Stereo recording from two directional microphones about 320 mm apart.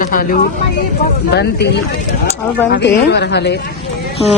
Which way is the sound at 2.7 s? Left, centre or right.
Left.